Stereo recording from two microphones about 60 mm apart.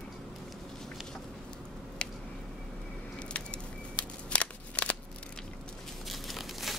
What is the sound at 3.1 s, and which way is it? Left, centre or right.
Scissors, centre.